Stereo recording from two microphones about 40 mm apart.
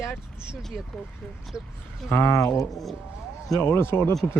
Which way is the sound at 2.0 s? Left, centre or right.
Left.